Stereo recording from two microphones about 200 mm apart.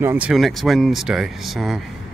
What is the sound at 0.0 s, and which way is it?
Speech, 10° right (ahead or behind).